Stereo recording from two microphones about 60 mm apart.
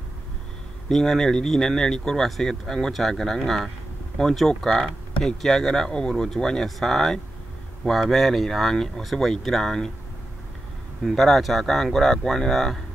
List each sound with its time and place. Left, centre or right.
0.8 s speech: centre
11.0 s speech: centre